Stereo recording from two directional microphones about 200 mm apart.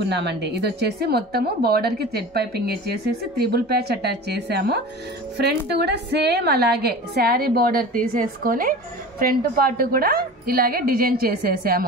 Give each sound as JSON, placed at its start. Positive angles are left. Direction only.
{"t": 0.0, "sound": "a woman's voice", "side_deg": -60}